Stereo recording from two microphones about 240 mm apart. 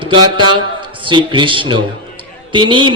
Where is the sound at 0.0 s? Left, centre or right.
Centre.